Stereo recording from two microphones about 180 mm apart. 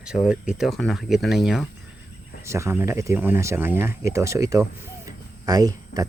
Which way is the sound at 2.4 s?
15° right (ahead or behind).